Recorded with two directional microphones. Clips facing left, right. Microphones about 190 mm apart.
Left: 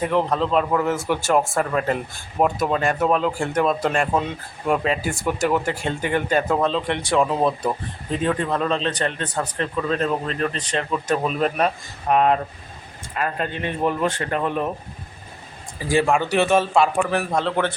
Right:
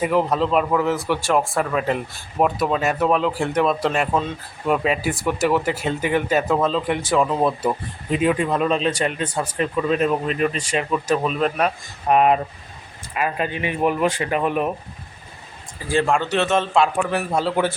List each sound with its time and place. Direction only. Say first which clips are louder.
0.0 s speech: right 1 dB; 5° right (ahead or behind)
8.1 s speech: right 3 dB; 10° right (ahead or behind)
11.2 s speech: even; 5° left (ahead or behind)
12.0 s speech: right 2 dB; 15° right (ahead or behind)
15.9 s speech: left 1 dB; 10° left (ahead or behind); by 17.7 s 5° right (ahead or behind)